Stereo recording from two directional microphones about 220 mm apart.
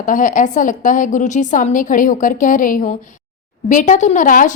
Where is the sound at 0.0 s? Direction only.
35° left (ahead or behind).